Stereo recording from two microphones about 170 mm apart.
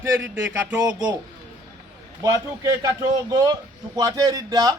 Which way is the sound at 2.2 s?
20° right (ahead or behind).